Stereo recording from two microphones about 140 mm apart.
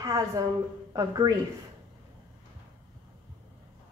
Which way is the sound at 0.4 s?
25° right (ahead or behind).